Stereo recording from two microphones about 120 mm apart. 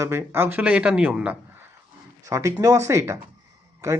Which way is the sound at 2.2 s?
25° right (ahead or behind).